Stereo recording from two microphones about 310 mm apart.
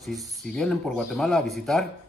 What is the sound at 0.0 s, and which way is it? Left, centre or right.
A man's voice, centre.